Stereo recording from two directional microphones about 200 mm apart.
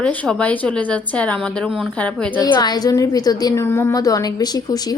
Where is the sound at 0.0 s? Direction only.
5° left (ahead or behind).